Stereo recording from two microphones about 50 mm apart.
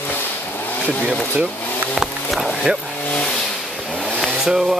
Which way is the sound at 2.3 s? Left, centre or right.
Centre.